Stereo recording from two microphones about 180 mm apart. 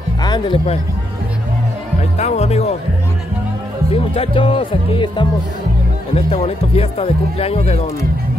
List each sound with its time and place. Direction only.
0.2 s speech: 25° left (ahead or behind)
2.1 s speech: 35° left (ahead or behind)
3.9 s speech: 35° left (ahead or behind)